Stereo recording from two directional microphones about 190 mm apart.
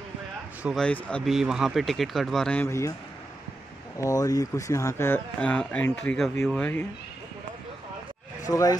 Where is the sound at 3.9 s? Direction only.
15° left (ahead or behind).